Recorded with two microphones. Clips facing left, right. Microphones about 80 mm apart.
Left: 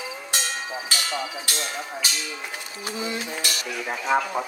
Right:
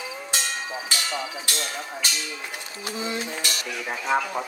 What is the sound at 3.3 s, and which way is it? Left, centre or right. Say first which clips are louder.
Cutlery: left 1 dB; centre.